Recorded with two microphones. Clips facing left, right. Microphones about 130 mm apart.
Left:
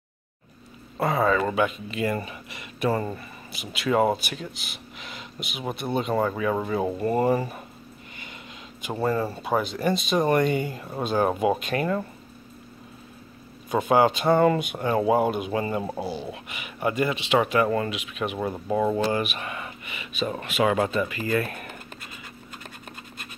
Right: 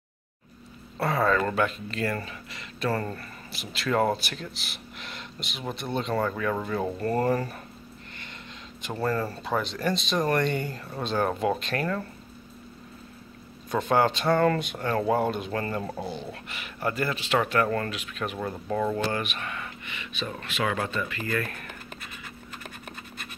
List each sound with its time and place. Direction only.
0.9 s speech: 10° left (ahead or behind)
8.8 s speech: 10° left (ahead or behind)
13.7 s speech: 10° left (ahead or behind)